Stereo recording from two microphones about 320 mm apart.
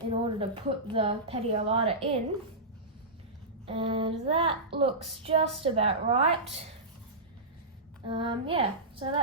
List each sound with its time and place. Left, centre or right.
0.1 s speech: centre
3.7 s speech: centre
8.0 s speech: centre